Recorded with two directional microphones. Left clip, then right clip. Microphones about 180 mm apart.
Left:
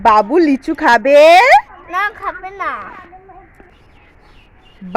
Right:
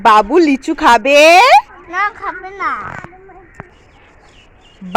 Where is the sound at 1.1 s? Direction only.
5° right (ahead or behind).